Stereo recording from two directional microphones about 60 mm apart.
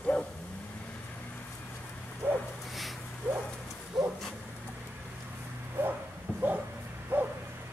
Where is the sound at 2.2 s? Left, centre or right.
Right.